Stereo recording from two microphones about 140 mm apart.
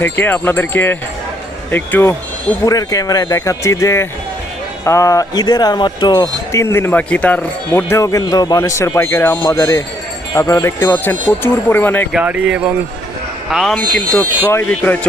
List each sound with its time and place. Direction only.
0.0 s speech: 15° left (ahead or behind)
2.6 s speech: 25° left (ahead or behind)
12.1 s speech: 10° right (ahead or behind)
13.7 s speech: 10° left (ahead or behind)